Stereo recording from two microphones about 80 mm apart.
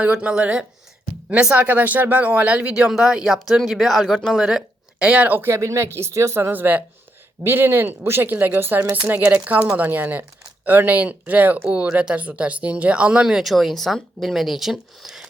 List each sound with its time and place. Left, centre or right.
0.0 s speech: centre